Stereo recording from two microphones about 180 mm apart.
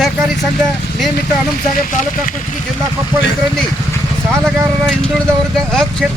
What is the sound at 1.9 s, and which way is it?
Speech, 45° left (ahead or behind).